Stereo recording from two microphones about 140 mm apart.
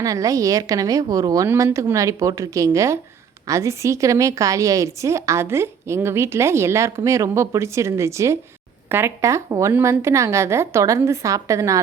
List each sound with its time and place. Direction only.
0.0 s a woman's voice: 25° right (ahead or behind)